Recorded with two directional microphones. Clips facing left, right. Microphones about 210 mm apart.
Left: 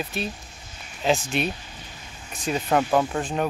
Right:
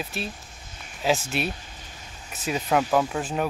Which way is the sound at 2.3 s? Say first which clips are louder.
Left 1 dB; 5° right (ahead or behind).